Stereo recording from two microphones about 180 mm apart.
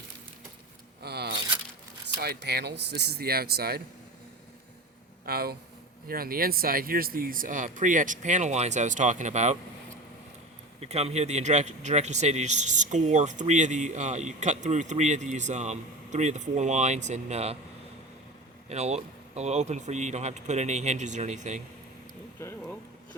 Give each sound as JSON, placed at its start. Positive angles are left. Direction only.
{"t": 1.0, "sound": "a sound", "side_deg": -65}
{"t": 2.2, "sound": "speech", "side_deg": -65}
{"t": 5.2, "sound": "speech", "side_deg": -60}
{"t": 10.8, "sound": "speech", "side_deg": -35}
{"t": 18.7, "sound": "speech", "side_deg": -35}